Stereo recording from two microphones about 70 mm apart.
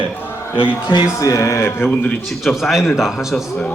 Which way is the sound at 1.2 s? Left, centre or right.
Left.